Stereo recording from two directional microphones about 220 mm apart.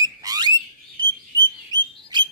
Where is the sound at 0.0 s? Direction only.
15° right (ahead or behind).